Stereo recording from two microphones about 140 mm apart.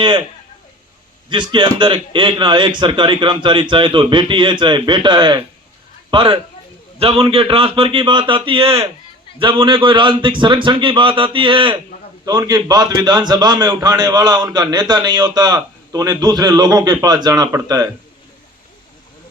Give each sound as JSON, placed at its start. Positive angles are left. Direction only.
{"t": 1.3, "sound": "a man's voice", "side_deg": -35}
{"t": 12.2, "sound": "a man's voice", "side_deg": -25}